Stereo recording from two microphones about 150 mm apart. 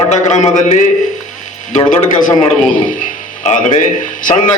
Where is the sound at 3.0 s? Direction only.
55° left (ahead or behind).